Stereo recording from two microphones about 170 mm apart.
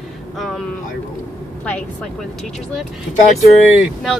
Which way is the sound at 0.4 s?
Centre (ahead or behind).